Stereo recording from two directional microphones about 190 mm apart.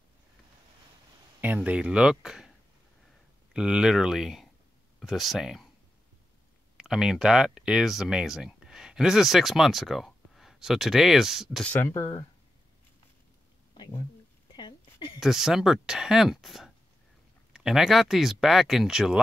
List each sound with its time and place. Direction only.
1.4 s speech: 10° right (ahead or behind)
3.5 s speech: 5° right (ahead or behind)
6.8 s speech: 5° right (ahead or behind); by 12.3 s 15° left (ahead or behind)
14.5 s a sound: 25° left (ahead or behind)
15.1 s speech: centre (ahead or behind)